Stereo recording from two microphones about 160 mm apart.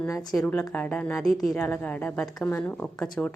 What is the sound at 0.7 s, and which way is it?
A woman's voice, 10° left (ahead or behind).